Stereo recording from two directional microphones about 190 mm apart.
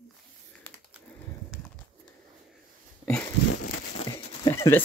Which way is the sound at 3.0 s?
5° left (ahead or behind).